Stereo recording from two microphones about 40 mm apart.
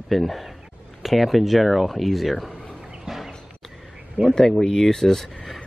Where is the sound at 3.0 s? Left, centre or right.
Centre.